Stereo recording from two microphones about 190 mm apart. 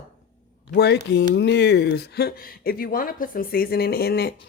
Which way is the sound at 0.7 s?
60° left (ahead or behind).